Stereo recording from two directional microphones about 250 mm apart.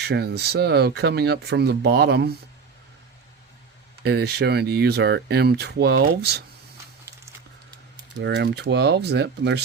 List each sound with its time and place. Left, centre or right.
0.0 s speech: right
4.0 s speech: right
8.2 s speech: right